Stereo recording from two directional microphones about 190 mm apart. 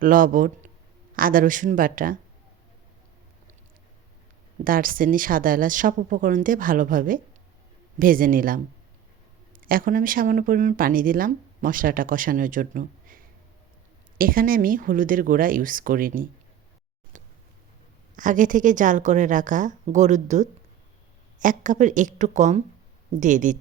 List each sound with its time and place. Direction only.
0.0 s speech: 45° right (ahead or behind)
4.6 s speech: 45° right (ahead or behind)
18.2 s a woman's voice: 45° right (ahead or behind)